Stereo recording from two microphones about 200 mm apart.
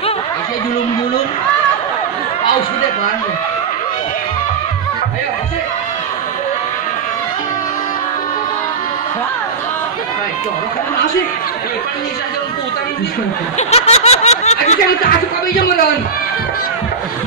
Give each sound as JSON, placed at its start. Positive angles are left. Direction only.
{"t": 13.6, "sound": "snicker", "side_deg": 30}